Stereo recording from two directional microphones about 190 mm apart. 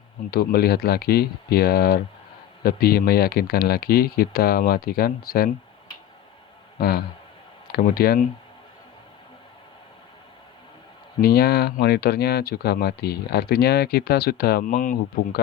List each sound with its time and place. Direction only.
0.3 s speech: 55° left (ahead or behind)
6.7 s a man's voice: 50° left (ahead or behind)
11.2 s speech: 55° left (ahead or behind)